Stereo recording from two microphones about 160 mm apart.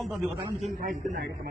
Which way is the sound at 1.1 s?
90° right.